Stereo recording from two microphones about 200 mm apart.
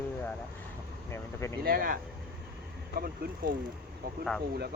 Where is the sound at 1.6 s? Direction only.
45° right (ahead or behind).